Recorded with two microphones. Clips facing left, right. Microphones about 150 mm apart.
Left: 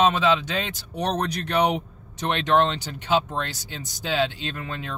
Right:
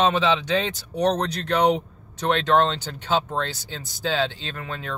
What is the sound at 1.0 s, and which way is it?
Speech, 10° left (ahead or behind).